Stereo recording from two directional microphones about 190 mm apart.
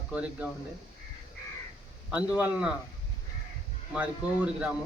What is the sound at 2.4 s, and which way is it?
Speech, 5° right (ahead or behind).